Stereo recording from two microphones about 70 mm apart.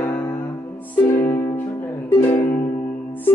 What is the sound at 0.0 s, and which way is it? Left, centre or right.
Music, left.